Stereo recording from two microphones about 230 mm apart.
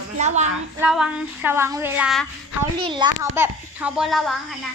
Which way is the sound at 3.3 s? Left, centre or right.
Centre.